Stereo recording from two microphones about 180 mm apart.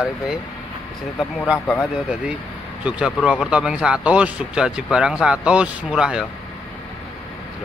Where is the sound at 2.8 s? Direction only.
5° right (ahead or behind).